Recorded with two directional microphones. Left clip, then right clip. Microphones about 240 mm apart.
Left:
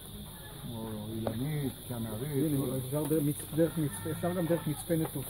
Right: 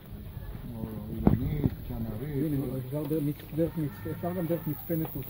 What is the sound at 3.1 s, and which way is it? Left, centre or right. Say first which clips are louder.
Speech: even; centre.